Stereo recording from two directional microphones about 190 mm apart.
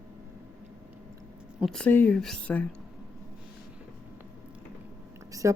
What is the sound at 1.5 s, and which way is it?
Speech, centre (ahead or behind).